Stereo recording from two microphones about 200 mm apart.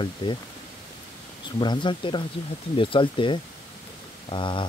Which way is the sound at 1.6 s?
25° left (ahead or behind).